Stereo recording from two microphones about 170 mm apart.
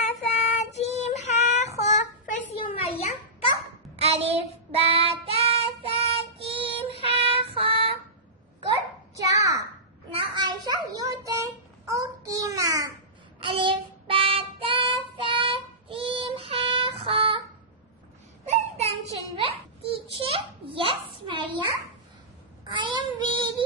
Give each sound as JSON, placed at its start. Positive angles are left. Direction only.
{"t": 0.0, "sound": "child singing", "side_deg": 45}
{"t": 2.6, "sound": "a sound", "side_deg": 35}
{"t": 4.0, "sound": "child singing", "side_deg": -35}
{"t": 9.1, "sound": "a sound", "side_deg": -20}
{"t": 11.9, "sound": "child singing", "side_deg": -20}
{"t": 13.4, "sound": "child singing", "side_deg": -30}
{"t": 18.4, "sound": "child singing", "side_deg": -40}
{"t": 19.4, "sound": "a sound", "side_deg": -30}
{"t": 22.7, "sound": "child singing", "side_deg": -30}